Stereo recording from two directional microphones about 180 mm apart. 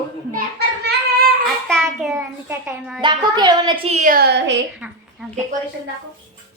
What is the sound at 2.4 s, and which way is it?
Speech, 5° right (ahead or behind).